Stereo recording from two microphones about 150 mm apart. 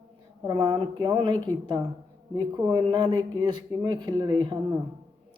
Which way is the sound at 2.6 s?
25° right (ahead or behind).